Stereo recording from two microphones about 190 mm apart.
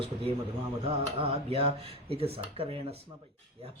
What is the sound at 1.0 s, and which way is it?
Mantra, 30° right (ahead or behind).